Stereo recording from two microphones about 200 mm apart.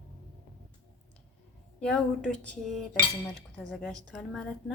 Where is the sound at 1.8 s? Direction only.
5° left (ahead or behind).